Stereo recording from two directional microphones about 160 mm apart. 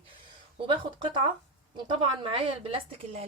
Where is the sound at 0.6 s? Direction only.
30° right (ahead or behind).